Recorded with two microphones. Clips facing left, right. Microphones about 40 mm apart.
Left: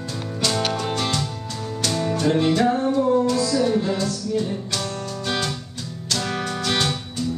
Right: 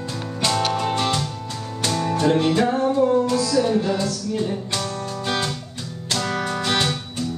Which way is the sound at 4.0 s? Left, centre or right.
Centre.